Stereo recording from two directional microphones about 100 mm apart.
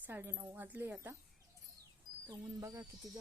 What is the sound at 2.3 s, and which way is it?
Speech, 35° right (ahead or behind).